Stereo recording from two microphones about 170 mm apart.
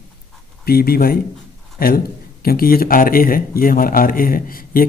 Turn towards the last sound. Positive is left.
turn(degrees=55)  # may be behind; listen again after turning